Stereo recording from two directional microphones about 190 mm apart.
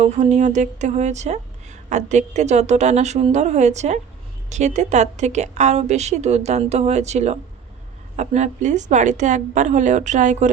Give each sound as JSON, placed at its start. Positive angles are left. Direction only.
{"t": 0.0, "sound": "speech", "side_deg": -40}